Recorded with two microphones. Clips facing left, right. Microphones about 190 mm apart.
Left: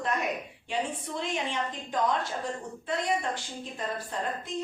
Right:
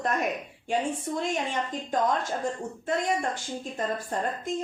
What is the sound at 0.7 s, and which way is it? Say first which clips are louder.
A woman's voice: right 4 dB; 45° right (ahead or behind).